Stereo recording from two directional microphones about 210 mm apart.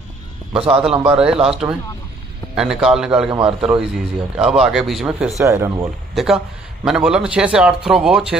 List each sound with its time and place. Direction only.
0.7 s a man's voice: 5° right (ahead or behind)
3.3 s a man's voice: 25° right (ahead or behind)
3.6 s a man's voice: 5° right (ahead or behind)
5.4 s speech: 15° right (ahead or behind)
6.1 s a man's voice: centre (ahead or behind)